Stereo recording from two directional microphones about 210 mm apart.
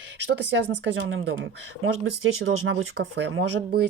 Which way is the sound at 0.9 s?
65° right (ahead or behind).